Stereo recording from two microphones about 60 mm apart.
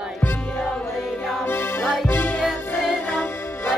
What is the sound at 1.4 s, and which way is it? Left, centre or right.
Music, left.